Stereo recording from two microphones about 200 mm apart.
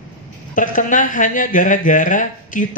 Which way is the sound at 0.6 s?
40° left (ahead or behind).